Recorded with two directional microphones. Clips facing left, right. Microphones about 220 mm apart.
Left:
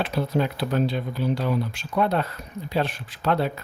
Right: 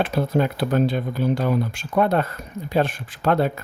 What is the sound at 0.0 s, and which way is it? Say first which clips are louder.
Speech: right 3 dB; 50° right (ahead or behind).